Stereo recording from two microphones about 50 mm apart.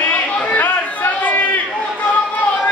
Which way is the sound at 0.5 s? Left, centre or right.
Left.